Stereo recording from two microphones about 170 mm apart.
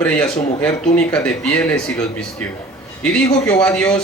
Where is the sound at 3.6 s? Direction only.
5° left (ahead or behind).